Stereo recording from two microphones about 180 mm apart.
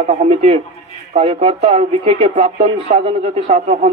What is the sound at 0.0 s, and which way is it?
Speech, 40° right (ahead or behind).